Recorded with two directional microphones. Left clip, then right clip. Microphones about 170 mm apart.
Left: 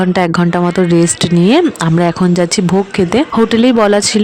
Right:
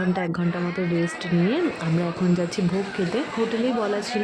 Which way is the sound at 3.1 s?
85° left.